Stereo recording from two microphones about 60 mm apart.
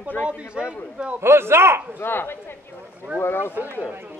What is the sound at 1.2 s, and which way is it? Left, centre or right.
Speech, right.